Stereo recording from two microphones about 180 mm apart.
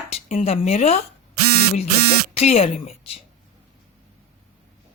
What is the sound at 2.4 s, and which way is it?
Speech, 35° left (ahead or behind).